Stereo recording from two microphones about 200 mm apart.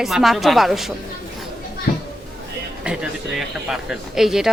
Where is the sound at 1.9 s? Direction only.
50° left (ahead or behind).